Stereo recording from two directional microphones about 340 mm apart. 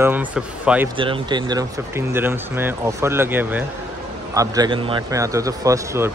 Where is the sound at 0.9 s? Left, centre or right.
Centre.